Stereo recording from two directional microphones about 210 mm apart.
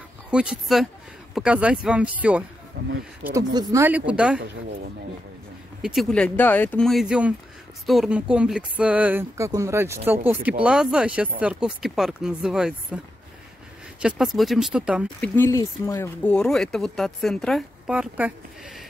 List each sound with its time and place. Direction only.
0.3 s speech: 5° right (ahead or behind)
2.8 s speech: 50° right (ahead or behind)
3.3 s speech: 15° right (ahead or behind)
5.8 s speech: centre (ahead or behind)
14.0 s speech: centre (ahead or behind)
15.1 s speech: 10° left (ahead or behind); by 18.3 s 5° right (ahead or behind)